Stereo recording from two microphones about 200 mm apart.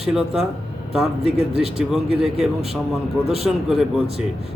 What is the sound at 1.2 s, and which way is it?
Speech, 30° right (ahead or behind).